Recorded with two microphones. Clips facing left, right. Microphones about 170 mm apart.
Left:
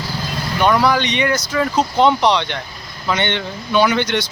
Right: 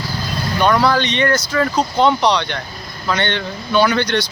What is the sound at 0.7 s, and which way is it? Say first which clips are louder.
Speech: even; 10° left (ahead or behind).